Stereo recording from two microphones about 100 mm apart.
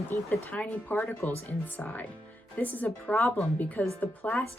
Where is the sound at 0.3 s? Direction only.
10° left (ahead or behind).